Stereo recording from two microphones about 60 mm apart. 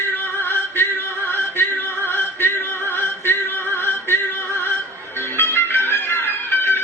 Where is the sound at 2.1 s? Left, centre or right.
Left.